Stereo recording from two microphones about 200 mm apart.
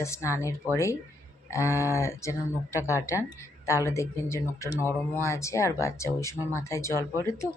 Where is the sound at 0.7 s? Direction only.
10° right (ahead or behind).